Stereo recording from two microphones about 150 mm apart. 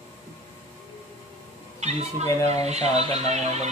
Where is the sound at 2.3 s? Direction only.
25° left (ahead or behind).